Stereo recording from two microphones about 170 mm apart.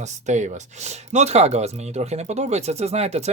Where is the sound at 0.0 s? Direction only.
45° right (ahead or behind).